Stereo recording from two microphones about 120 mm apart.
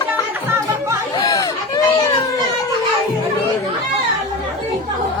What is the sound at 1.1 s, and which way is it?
Chatter, 30° left (ahead or behind).